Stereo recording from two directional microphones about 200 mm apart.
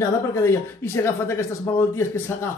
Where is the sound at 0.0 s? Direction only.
15° left (ahead or behind).